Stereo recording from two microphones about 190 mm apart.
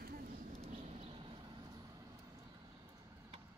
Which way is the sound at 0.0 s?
50° right (ahead or behind).